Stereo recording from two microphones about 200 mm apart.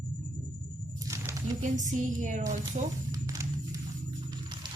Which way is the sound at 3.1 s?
15° right (ahead or behind).